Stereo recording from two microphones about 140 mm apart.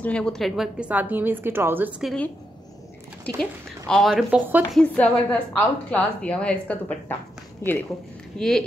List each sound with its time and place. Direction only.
0.0 s a woman's voice: 5° left (ahead or behind); by 1.9 s 15° right (ahead or behind)
3.3 s speech: 5° left (ahead or behind)
4.3 s a woman's voice: 10° right (ahead or behind)
4.7 s a woman's voice: 10° left (ahead or behind)
8.4 s speech: 5° left (ahead or behind)